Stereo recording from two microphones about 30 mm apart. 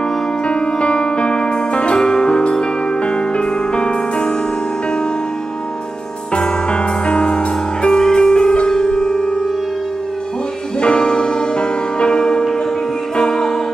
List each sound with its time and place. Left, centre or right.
0.5 s music: left
6.3 s music: left
10.8 s music: left